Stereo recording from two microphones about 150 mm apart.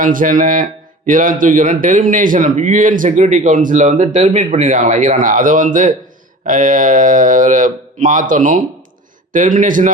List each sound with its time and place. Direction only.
0.0 s speech: 65° right (ahead or behind)